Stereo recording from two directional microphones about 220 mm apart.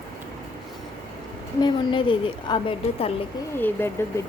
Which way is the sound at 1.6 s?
20° left (ahead or behind).